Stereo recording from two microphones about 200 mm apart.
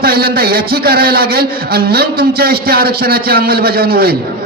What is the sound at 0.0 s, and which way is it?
A man's voice, 50° right (ahead or behind).